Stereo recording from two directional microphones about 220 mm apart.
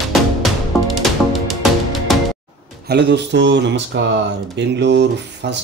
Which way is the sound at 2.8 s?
50° right (ahead or behind).